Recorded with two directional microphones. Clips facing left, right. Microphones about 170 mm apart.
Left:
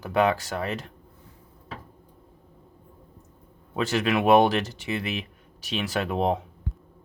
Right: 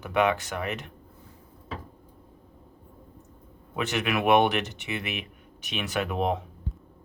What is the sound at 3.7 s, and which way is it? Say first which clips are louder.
Speech: left 3 dB; 30° left (ahead or behind).